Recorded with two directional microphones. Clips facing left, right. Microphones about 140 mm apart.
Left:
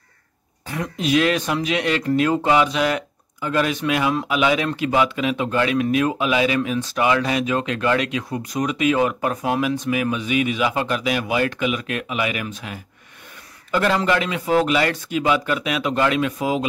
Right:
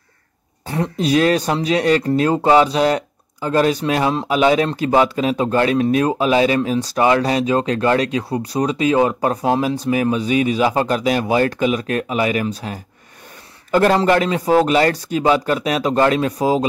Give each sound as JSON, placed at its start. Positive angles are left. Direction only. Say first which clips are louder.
{"t": 0.7, "sound": "speech", "louder": "right 4 dB", "side_deg": -35}